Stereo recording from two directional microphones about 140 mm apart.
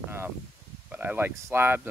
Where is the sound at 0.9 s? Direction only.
15° right (ahead or behind).